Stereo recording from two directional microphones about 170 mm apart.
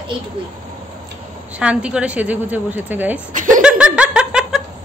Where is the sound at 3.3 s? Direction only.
50° right (ahead or behind).